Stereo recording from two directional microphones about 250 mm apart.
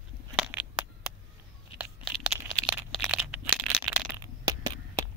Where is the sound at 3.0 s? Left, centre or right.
Centre.